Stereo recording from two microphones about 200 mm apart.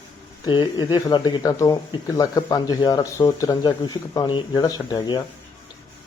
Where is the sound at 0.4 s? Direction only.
20° left (ahead or behind).